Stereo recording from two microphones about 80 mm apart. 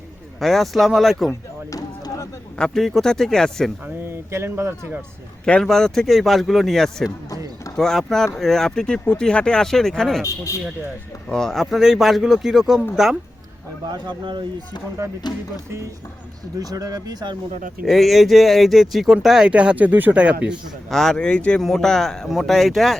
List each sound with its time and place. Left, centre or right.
0.3 s speech: centre
2.6 s speech: centre
4.0 s a sound: right
5.6 s speech: centre
10.2 s a man's voice: left
11.3 s speech: centre
13.9 s speech: right
16.6 s speech: right
17.8 s speech: centre
20.9 s speech: centre